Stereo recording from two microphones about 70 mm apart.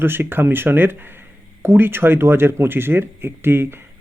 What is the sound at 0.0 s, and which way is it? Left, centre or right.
Speech, right.